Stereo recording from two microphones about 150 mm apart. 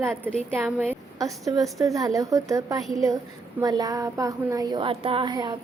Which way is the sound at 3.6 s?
25° right (ahead or behind).